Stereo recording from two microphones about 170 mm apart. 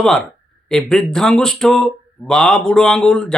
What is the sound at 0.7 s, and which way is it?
Speech, 5° left (ahead or behind).